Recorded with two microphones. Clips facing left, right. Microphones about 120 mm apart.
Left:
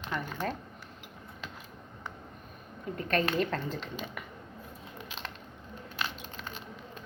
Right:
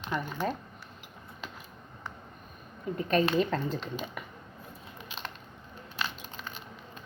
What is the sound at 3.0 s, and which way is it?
Speech, 15° right (ahead or behind).